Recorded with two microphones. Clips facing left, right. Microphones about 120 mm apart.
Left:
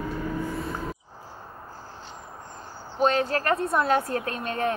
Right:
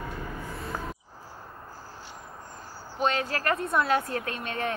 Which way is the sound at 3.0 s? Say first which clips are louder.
Left 4 dB; 35° left (ahead or behind).